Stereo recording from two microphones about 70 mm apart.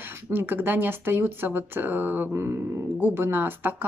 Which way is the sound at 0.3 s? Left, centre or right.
Right.